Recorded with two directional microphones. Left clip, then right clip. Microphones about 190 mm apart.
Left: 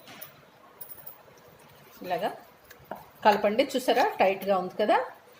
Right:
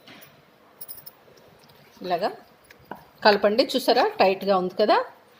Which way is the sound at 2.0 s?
40° right (ahead or behind).